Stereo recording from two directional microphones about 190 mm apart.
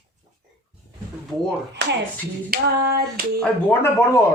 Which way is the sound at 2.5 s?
50° right (ahead or behind).